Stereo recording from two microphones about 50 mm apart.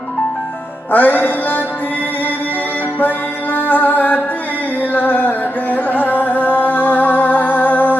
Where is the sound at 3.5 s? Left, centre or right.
Left.